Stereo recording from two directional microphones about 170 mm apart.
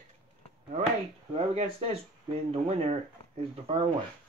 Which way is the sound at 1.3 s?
35° right (ahead or behind).